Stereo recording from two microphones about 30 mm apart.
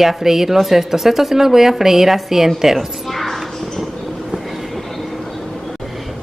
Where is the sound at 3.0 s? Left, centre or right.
Centre.